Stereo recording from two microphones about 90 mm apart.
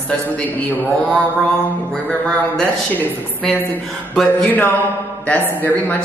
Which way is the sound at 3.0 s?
20° left (ahead or behind).